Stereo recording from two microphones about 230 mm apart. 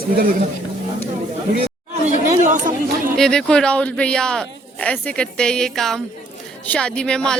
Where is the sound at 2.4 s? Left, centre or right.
Right.